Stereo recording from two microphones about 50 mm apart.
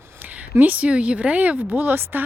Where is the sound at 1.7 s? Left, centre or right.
Right.